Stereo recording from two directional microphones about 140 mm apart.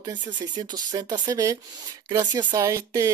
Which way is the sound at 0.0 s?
30° right (ahead or behind).